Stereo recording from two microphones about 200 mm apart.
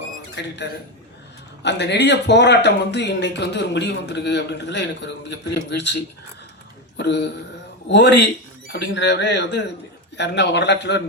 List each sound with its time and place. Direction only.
0.3 s speech: 60° left (ahead or behind)